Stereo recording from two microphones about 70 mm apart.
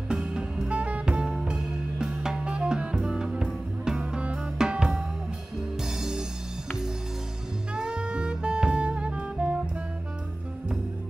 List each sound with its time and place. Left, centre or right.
0.1 s music: centre
7.7 s music: centre